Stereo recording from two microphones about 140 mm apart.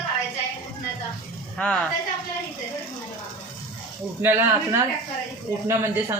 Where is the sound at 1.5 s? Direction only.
10° left (ahead or behind).